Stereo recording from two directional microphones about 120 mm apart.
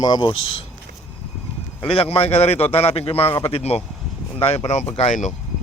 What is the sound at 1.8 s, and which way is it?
A man's voice, 50° left (ahead or behind).